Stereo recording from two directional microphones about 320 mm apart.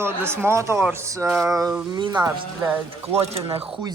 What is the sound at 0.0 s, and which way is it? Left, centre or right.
A woman's voice, centre.